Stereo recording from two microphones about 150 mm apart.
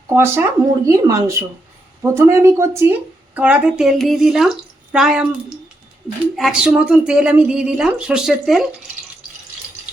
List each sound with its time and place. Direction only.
0.1 s speech: 15° right (ahead or behind)
6.3 s speech: 5° right (ahead or behind)